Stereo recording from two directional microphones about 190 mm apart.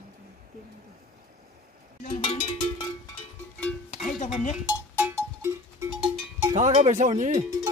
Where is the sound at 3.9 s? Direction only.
40° left (ahead or behind).